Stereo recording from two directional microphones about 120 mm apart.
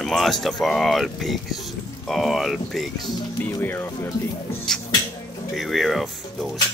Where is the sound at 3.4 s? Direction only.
15° left (ahead or behind).